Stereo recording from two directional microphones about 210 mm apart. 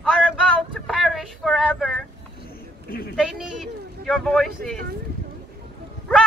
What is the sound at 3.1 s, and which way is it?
Speech, 5° right (ahead or behind).